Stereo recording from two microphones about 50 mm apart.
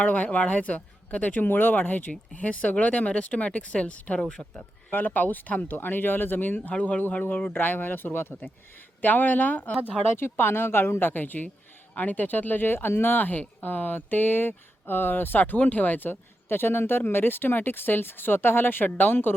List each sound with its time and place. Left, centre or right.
0.0 s speech: left
4.9 s speech: left
6.7 s speech: left
7.3 s speech: left
10.2 s speech: left